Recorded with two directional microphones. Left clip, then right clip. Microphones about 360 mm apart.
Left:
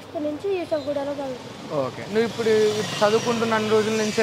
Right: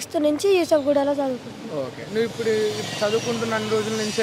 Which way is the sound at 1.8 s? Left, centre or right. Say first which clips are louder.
Left 1 dB; centre.